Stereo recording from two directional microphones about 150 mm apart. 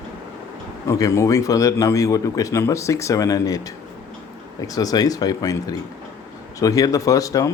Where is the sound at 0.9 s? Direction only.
20° left (ahead or behind).